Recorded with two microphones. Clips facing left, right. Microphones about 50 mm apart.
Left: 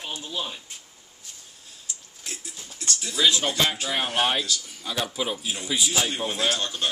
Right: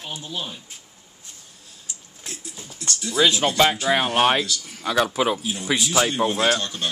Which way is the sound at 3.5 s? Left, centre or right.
Right.